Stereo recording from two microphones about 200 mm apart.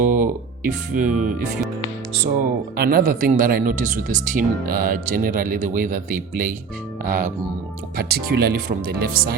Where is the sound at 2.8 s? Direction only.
45° right (ahead or behind).